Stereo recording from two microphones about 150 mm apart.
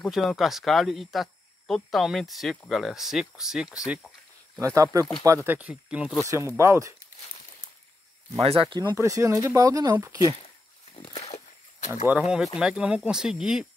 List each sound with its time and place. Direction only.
0.1 s speech: centre (ahead or behind)
4.6 s speech: 20° right (ahead or behind)
6.2 s speech: 20° right (ahead or behind)
8.4 s speech: 40° right (ahead or behind)
8.9 s speech: 20° right (ahead or behind)
10.9 s a sound: 45° left (ahead or behind)
11.9 s speech: 10° right (ahead or behind)